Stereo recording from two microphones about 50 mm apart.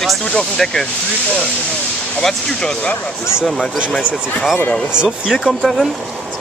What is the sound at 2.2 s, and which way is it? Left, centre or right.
Speech, centre.